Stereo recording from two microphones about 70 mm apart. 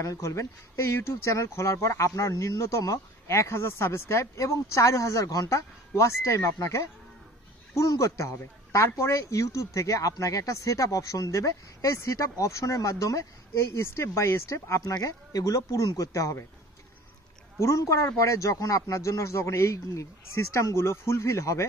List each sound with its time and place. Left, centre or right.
0.0 s speech: left
7.8 s speech: left
8.4 s speech: left
8.9 s speech: left
14.8 s speech: left
17.6 s speech: left